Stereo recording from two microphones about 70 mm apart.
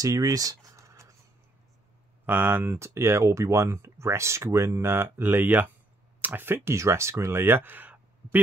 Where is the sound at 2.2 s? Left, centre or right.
Right.